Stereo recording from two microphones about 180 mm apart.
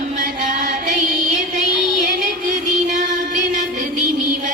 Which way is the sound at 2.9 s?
45° right (ahead or behind).